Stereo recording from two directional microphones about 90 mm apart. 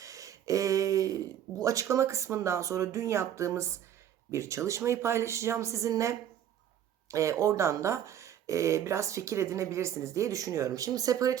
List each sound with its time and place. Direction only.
0.0 s speech: 40° right (ahead or behind)